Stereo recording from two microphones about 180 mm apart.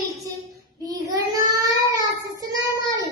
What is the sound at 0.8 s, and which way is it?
Child singing, 20° right (ahead or behind).